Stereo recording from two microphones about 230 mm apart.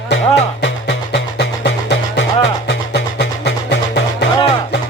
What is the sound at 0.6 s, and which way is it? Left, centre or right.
Music, left.